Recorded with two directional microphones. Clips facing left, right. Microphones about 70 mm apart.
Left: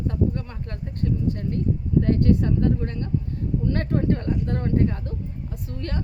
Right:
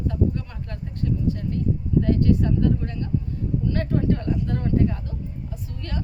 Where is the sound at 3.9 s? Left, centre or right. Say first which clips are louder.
Right 1 dB; left.